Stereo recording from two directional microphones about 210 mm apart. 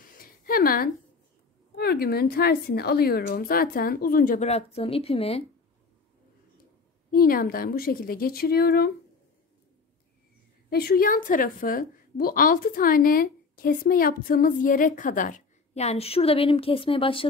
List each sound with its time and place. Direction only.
0.2 s a sound: 45° left (ahead or behind)
1.8 s a woman's voice: 50° left (ahead or behind); by 5.4 s 30° left (ahead or behind)
7.1 s a woman's voice: 45° left (ahead or behind)
10.7 s a woman's voice: 45° left (ahead or behind); by 17.3 s 25° left (ahead or behind)